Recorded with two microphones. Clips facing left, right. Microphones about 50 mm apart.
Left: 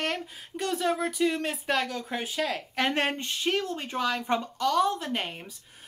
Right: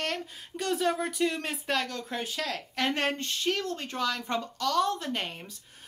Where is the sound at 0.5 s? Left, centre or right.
Centre.